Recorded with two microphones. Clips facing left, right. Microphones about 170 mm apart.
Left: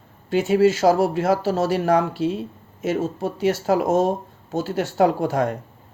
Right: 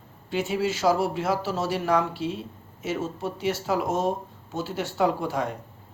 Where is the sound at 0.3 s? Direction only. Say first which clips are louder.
Left 9 dB; 45° left (ahead or behind).